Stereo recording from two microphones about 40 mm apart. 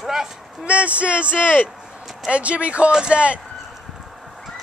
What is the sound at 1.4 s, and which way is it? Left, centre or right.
Speech, left.